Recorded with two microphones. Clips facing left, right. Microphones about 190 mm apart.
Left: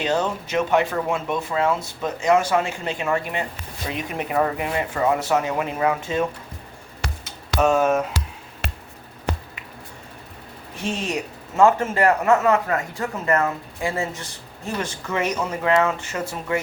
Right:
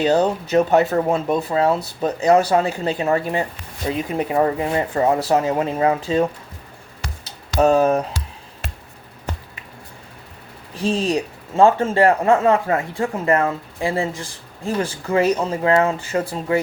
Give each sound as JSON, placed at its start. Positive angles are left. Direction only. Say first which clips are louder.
{"t": 0.0, "sound": "speech", "louder": "right 6 dB", "side_deg": -35}
{"t": 7.0, "sound": "music", "louder": "left 2 dB", "side_deg": 65}
{"t": 7.6, "sound": "speech", "louder": "right 3 dB", "side_deg": -35}
{"t": 8.6, "sound": "a sound", "louder": "left 2 dB", "side_deg": 75}
{"t": 10.8, "sound": "speech", "louder": "right 6 dB", "side_deg": -35}